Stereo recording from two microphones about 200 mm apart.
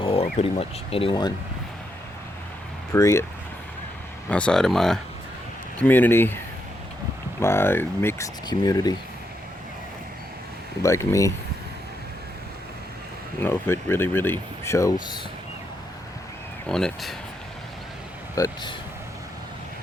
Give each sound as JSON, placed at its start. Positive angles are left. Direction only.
{"t": 0.0, "sound": "a sound", "side_deg": 30}
{"t": 0.9, "sound": "speech", "side_deg": 25}
{"t": 2.9, "sound": "speech", "side_deg": 15}
{"t": 4.3, "sound": "speech", "side_deg": 5}
{"t": 10.8, "sound": "speech", "side_deg": 15}
{"t": 13.4, "sound": "speech", "side_deg": 10}
{"t": 16.6, "sound": "speech", "side_deg": 5}
{"t": 18.3, "sound": "speech", "side_deg": 15}